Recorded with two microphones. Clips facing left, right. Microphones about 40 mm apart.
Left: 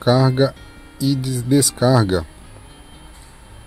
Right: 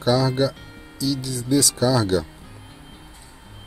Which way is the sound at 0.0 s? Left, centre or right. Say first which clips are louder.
Left 4 dB; left.